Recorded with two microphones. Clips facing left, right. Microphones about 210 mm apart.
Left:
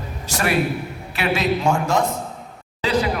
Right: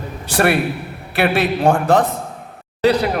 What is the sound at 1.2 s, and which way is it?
A man's voice, 55° right (ahead or behind).